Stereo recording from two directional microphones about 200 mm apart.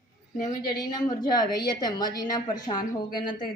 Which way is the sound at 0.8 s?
20° left (ahead or behind).